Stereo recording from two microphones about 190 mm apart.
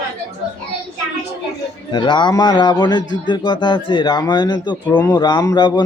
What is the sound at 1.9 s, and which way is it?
A man's voice, 25° left (ahead or behind).